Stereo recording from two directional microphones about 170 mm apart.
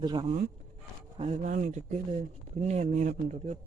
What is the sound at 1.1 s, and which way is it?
Speech, 40° right (ahead or behind).